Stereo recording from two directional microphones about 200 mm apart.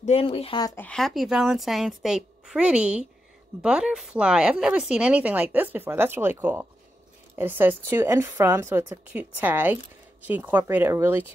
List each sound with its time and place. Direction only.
0.0 s speech: 30° left (ahead or behind)
0.8 s a woman's voice: centre (ahead or behind)